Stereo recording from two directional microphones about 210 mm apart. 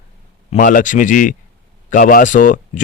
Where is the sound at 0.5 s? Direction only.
40° left (ahead or behind).